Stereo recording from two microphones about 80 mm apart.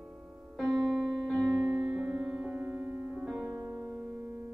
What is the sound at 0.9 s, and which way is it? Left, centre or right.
Music, centre.